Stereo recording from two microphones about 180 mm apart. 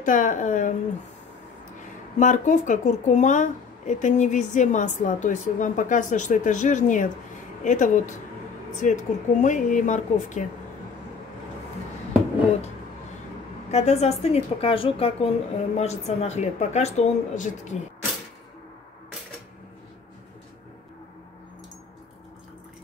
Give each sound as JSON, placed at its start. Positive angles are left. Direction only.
{"t": 0.0, "sound": "a woman's voice", "side_deg": 45}
{"t": 2.1, "sound": "a woman's voice", "side_deg": 45}
{"t": 13.7, "sound": "a woman's voice", "side_deg": 35}